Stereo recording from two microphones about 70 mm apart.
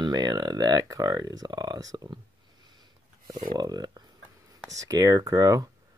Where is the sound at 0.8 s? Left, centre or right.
Right.